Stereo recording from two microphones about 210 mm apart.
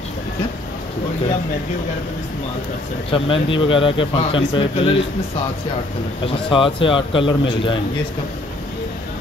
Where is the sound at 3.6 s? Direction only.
25° left (ahead or behind).